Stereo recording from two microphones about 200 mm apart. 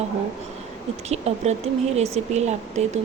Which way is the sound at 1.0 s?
30° right (ahead or behind).